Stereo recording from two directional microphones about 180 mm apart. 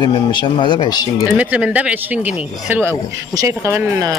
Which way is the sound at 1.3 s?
5° right (ahead or behind).